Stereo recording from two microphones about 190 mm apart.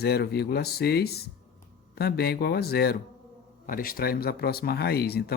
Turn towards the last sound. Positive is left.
turn(degrees=55)  # may be behind; listen again after turning